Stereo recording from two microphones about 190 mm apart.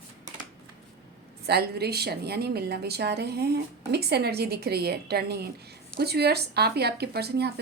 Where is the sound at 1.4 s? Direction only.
55° right (ahead or behind).